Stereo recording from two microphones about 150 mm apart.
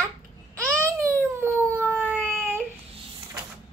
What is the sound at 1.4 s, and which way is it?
Howl, 15° right (ahead or behind).